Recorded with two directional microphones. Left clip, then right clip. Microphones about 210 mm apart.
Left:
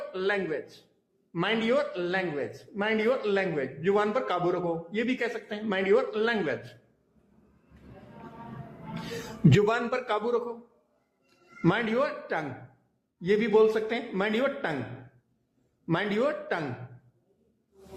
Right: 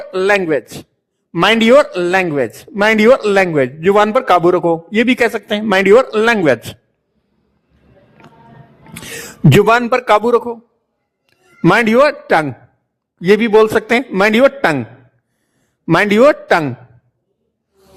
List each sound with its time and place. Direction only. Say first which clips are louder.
0.1 s a man's voice: right 17 dB; 50° right (ahead or behind)
9.5 s a man's voice: right 15 dB; 50° right (ahead or behind)
11.6 s a man's voice: right 17 dB; 50° right (ahead or behind)
15.9 s a man's voice: right 18 dB; 50° right (ahead or behind)